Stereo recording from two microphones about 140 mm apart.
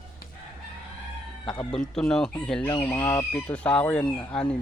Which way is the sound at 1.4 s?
30° left (ahead or behind).